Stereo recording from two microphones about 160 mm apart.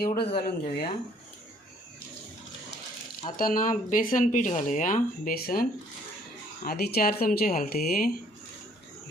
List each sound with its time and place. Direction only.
0.0 s speech: 75° left (ahead or behind)
0.6 s speech: 35° left (ahead or behind)
3.3 s speech: 60° left (ahead or behind)
6.7 s speech: 75° left (ahead or behind)